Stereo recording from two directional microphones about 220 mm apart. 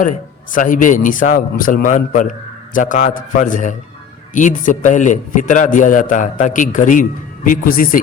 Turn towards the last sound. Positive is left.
turn(degrees=40)  # may be behind; listen again after turning